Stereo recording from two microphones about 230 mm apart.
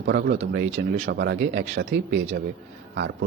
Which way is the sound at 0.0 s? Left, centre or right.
Right.